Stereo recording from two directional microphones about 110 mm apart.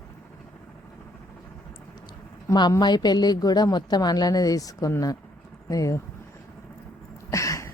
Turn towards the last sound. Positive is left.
turn(degrees=30)  # may be behind; listen again after turning